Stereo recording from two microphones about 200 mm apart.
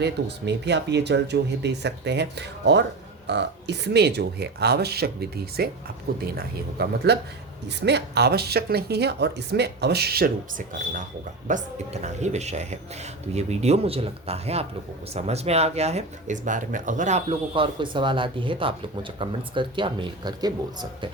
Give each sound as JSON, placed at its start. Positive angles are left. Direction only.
{"t": 0.0, "sound": "speech", "side_deg": -60}
{"t": 11.4, "sound": "speech", "side_deg": -35}